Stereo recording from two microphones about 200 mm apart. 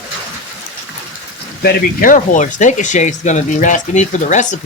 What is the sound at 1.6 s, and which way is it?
Speech, 50° left (ahead or behind).